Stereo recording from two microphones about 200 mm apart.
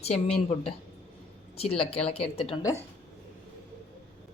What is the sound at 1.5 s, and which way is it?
Speech, 30° left (ahead or behind).